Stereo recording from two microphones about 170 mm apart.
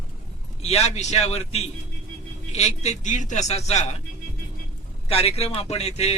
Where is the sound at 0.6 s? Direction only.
40° left (ahead or behind).